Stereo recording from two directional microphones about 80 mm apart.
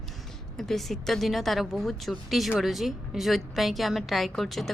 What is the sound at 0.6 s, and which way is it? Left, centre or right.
A woman's voice, centre.